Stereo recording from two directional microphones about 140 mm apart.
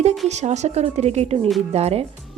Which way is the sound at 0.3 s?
55° right (ahead or behind).